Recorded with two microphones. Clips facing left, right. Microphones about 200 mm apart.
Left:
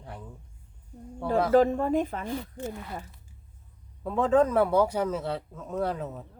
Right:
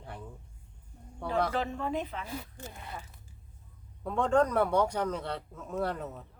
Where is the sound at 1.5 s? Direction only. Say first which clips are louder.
Left 11 dB; 45° left (ahead or behind).